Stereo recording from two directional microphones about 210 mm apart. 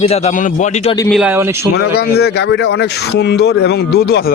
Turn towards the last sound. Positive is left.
turn(degrees=50)  # may be behind; listen again after turning